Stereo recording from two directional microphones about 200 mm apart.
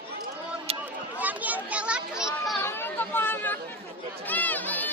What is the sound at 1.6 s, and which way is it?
Children playing, 5° right (ahead or behind).